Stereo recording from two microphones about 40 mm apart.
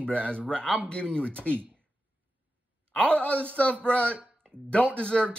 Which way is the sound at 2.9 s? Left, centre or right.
Left.